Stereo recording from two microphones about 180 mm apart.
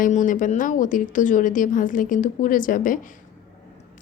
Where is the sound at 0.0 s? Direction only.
45° left (ahead or behind).